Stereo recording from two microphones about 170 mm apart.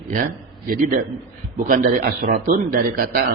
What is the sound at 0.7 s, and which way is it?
A man's voice, 50° right (ahead or behind).